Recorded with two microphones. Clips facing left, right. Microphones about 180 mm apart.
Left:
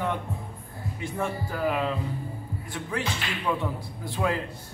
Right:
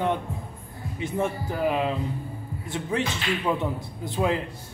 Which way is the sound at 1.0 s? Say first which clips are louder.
Right 4 dB; 20° right (ahead or behind).